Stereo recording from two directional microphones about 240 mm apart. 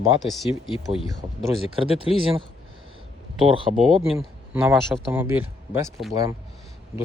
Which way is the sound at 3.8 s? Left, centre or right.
Centre.